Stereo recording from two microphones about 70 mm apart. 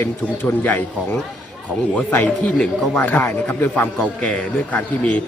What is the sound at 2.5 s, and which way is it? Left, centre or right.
A man's voice, left.